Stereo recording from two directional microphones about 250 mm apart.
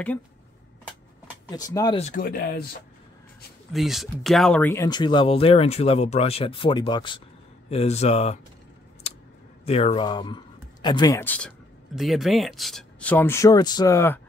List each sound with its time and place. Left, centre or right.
1.5 s speech: centre
2.2 s speech: left
3.7 s speech: centre; by 8.4 s left
9.7 s speech: left; by 14.2 s centre